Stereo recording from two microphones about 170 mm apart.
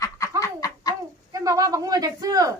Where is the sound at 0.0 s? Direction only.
20° left (ahead or behind).